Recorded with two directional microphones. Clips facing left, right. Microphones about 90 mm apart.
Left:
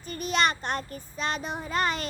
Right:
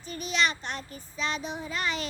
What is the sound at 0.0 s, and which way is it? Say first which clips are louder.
Child singing: left 3 dB; 50° left (ahead or behind).